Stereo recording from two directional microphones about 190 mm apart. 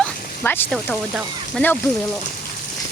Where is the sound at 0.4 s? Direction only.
10° left (ahead or behind).